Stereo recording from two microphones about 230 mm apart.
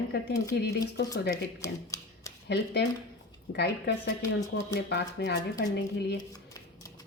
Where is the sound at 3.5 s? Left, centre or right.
Left.